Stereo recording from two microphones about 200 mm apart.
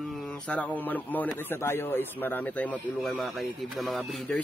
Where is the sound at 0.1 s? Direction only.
5° left (ahead or behind).